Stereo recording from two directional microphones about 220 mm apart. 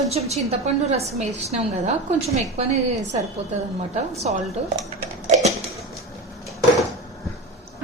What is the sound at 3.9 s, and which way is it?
Speech, 30° right (ahead or behind).